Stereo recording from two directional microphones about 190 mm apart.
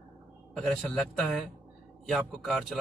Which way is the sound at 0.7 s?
Centre (ahead or behind).